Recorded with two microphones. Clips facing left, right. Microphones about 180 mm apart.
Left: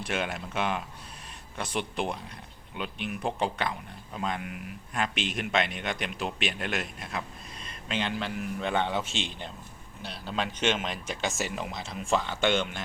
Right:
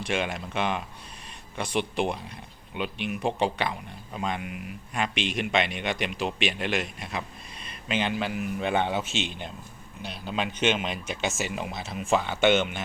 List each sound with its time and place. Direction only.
0.0 s speech: 5° left (ahead or behind)
9.0 s speech: 30° left (ahead or behind)
10.2 s speech: 5° right (ahead or behind)